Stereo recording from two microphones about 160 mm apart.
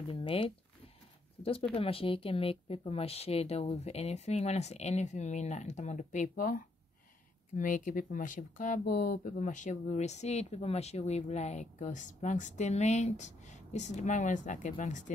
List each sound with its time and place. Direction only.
0.1 s speech: 35° left (ahead or behind); by 15.0 s 50° left (ahead or behind)